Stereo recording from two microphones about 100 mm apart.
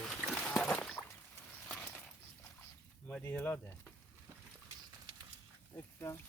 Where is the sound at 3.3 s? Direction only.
20° left (ahead or behind).